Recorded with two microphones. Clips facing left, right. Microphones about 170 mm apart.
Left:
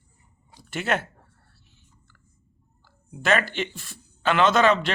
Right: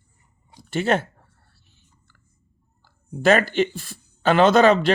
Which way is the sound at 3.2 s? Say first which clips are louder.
Right 6 dB; 40° right (ahead or behind).